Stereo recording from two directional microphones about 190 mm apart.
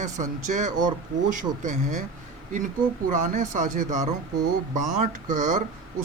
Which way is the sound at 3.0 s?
45° right (ahead or behind).